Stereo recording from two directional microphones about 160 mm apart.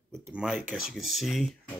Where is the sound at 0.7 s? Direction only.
Centre (ahead or behind).